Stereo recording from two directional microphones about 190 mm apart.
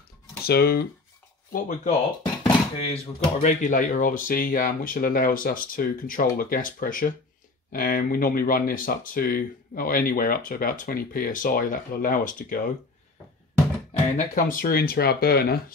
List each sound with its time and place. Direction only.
0.4 s speech: 55° left (ahead or behind)
2.4 s speech: 30° left (ahead or behind); by 12.7 s 45° left (ahead or behind)
14.1 s speech: 45° left (ahead or behind)